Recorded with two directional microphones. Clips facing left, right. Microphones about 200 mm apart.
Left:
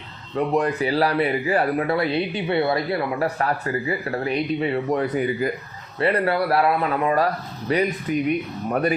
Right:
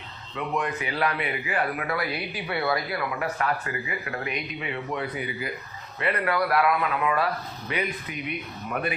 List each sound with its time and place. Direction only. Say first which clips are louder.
0.3 s speech: left 8 dB; 40° left (ahead or behind)
6.0 s speech: left 5 dB; 35° left (ahead or behind)